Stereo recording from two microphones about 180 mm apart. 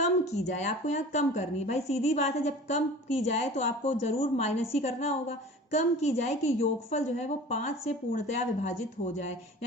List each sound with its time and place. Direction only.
0.0 s speech: 40° left (ahead or behind)